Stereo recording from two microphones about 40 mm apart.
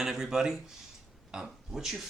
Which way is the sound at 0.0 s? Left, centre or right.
Centre.